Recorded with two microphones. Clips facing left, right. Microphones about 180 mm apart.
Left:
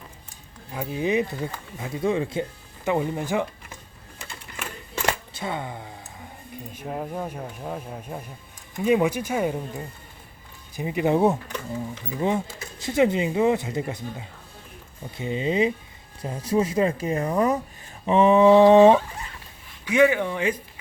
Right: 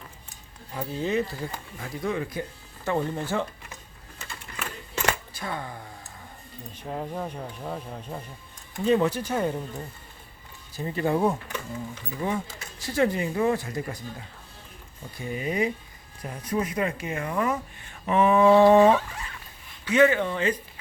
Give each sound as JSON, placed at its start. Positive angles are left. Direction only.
{"t": 0.7, "sound": "speech", "side_deg": 10}
{"t": 2.8, "sound": "speech", "side_deg": 15}
{"t": 5.0, "sound": "a sound", "side_deg": 25}
{"t": 6.7, "sound": "speech", "side_deg": 10}
{"t": 19.8, "sound": "speech", "side_deg": 10}